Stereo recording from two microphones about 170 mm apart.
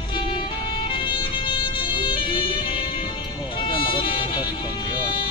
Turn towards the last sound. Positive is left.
turn(degrees=30)  # may be behind; listen again after turning